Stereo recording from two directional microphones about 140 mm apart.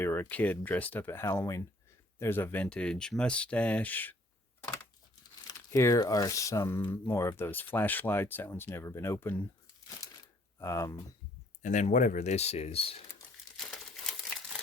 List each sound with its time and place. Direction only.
0.0 s speech: 15° left (ahead or behind)
5.7 s speech: 20° left (ahead or behind)
10.6 s speech: 20° left (ahead or behind)
11.6 s speech: 60° left (ahead or behind); by 13.0 s 45° left (ahead or behind)
13.6 s crumpling: centre (ahead or behind)